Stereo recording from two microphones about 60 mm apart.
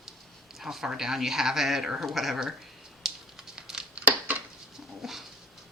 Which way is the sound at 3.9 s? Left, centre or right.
Right.